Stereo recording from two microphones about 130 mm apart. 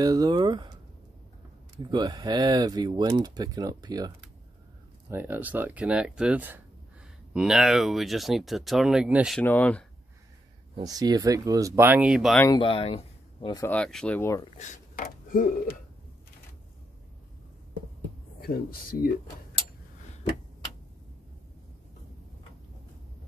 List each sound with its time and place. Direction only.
0.0 s speech: 30° right (ahead or behind)
1.8 s speech: 35° right (ahead or behind)
5.1 s speech: 15° right (ahead or behind)
9.4 s speech: 10° left (ahead or behind)
10.8 s speech: 30° right (ahead or behind); by 12.4 s 5° right (ahead or behind)
12.4 s speech: 40° left (ahead or behind)
13.6 s speech: 10° left (ahead or behind)
14.6 s speech: 80° left